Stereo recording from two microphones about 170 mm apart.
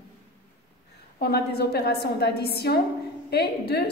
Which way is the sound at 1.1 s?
70° left (ahead or behind).